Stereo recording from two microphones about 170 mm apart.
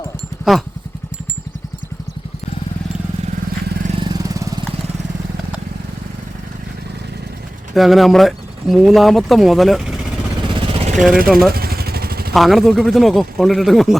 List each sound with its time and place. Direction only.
0.5 s speech: centre (ahead or behind)
4.0 s vehicle: 20° right (ahead or behind)
7.7 s speech: centre (ahead or behind)
10.5 s vehicle: 30° right (ahead or behind)
10.9 s speech: centre (ahead or behind)
11.5 s vehicle: 65° right (ahead or behind)
12.3 s speech: centre (ahead or behind)